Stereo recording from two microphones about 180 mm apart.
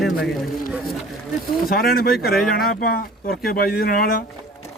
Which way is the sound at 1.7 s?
55° left (ahead or behind).